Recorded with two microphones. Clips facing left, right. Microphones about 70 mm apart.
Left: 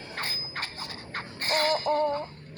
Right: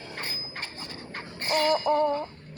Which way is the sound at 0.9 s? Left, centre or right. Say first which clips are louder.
Left 1 dB; left.